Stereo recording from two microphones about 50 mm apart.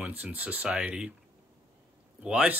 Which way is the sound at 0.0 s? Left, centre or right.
Right.